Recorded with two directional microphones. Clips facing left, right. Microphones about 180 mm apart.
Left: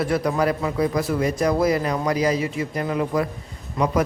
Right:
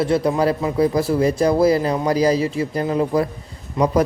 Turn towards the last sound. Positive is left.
turn(degrees=-20)  # may be behind; listen again after turning